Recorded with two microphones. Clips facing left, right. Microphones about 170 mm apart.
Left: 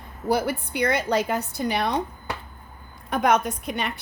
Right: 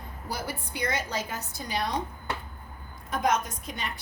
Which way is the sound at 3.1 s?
65° left (ahead or behind).